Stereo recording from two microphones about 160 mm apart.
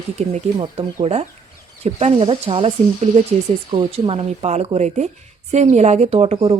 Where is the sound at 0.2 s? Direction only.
40° right (ahead or behind).